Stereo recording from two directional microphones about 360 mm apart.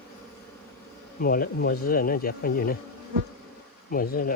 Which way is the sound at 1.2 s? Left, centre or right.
Left.